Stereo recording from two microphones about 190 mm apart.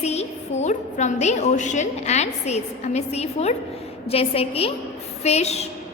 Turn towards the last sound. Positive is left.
turn(degrees=35)  # may be behind; listen again after turning